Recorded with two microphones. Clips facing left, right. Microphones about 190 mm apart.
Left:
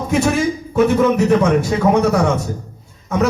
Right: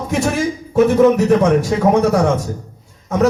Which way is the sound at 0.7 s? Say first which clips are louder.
Right 4 dB; 40° right (ahead or behind).